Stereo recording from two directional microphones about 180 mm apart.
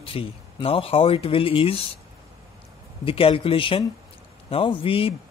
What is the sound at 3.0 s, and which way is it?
Speech, 30° left (ahead or behind).